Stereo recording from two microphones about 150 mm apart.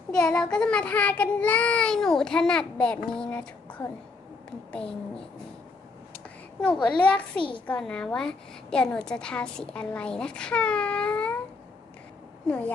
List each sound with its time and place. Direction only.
0.1 s child singing: 5° left (ahead or behind)
6.8 s child singing: 10° left (ahead or behind)
7.3 s a child's voice: 35° left (ahead or behind)
7.7 s child singing: 5° left (ahead or behind)
12.5 s child singing: 10° left (ahead or behind)